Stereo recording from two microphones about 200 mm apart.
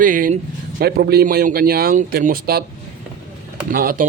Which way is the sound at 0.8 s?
55° right (ahead or behind).